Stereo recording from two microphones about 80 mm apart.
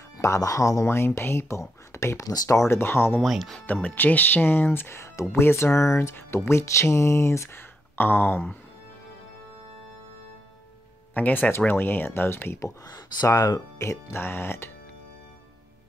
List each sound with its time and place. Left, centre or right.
0.2 s speech: left
2.7 s speech: left
3.2 s speech: centre
3.6 s speech: centre
11.1 s speech: centre
12.4 s speech: left